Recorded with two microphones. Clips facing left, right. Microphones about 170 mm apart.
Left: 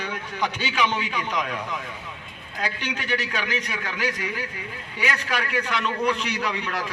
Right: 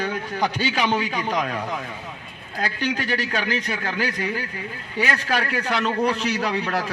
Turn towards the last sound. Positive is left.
turn(degrees=-35)  # may be behind; listen again after turning